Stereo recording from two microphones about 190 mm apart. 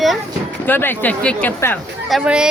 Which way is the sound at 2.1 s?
5° right (ahead or behind).